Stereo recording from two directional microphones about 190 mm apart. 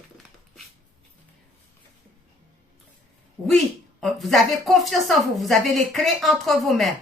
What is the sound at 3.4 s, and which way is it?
A woman's voice, centre (ahead or behind).